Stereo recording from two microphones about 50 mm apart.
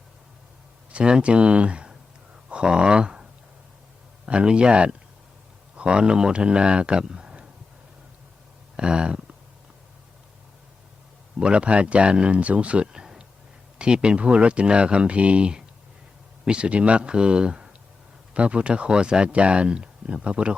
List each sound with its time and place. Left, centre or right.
0.9 s speech: right
4.3 s speech: right
8.7 s a sound: centre
11.3 s speech: right